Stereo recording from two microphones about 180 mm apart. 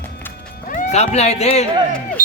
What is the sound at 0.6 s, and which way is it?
Speech, 45° left (ahead or behind).